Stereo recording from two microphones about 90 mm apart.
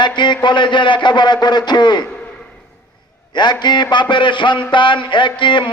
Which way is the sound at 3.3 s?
55° left (ahead or behind).